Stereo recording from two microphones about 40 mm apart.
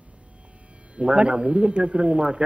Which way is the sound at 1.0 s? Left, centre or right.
Right.